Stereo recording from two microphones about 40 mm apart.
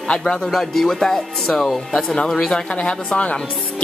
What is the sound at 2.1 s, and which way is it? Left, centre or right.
Speech, centre.